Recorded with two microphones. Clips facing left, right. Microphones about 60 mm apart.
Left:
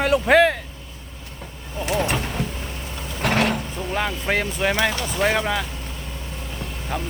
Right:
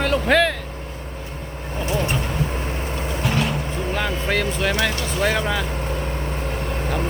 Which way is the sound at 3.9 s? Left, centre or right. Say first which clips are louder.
Left 1 dB; centre.